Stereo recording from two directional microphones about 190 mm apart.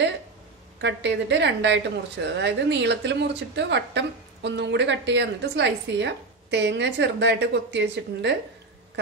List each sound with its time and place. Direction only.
0.7 s a woman's voice: 65° right (ahead or behind)